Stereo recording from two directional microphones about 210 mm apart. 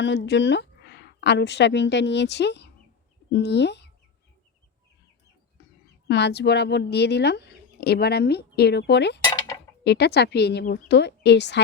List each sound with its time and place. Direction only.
0.0 s a woman's voice: 55° left (ahead or behind)
5.6 s a sound: 55° left (ahead or behind)
6.1 s speech: 55° left (ahead or behind)